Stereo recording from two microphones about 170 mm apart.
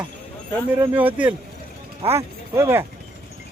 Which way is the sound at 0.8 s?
10° right (ahead or behind).